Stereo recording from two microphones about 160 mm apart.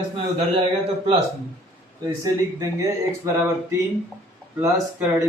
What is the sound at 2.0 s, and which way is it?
Speech, 25° right (ahead or behind).